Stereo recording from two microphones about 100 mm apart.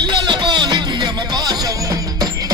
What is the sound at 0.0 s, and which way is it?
Music, 50° right (ahead or behind).